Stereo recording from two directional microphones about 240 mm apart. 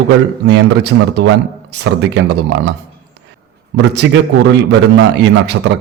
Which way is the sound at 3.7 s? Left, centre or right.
Right.